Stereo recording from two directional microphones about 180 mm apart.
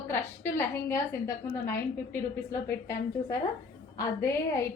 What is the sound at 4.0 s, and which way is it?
Speech, 15° left (ahead or behind).